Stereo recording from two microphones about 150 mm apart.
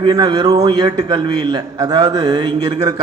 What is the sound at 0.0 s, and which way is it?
A man's voice, 30° right (ahead or behind).